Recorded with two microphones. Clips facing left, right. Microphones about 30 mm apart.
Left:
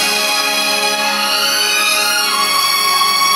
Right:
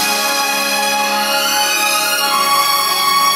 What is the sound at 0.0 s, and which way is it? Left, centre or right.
Music, left.